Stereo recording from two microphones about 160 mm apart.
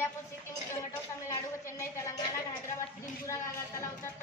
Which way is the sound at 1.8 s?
15° left (ahead or behind).